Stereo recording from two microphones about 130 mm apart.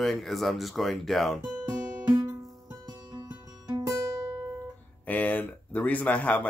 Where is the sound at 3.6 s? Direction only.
30° right (ahead or behind).